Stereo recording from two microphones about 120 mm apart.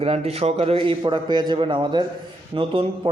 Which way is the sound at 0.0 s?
55° right (ahead or behind).